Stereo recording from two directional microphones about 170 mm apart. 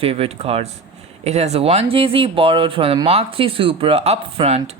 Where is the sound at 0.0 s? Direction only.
35° right (ahead or behind).